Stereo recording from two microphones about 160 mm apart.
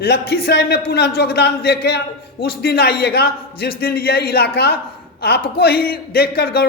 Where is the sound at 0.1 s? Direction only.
90° left.